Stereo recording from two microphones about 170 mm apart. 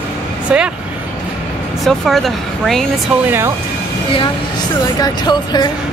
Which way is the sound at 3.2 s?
15° right (ahead or behind).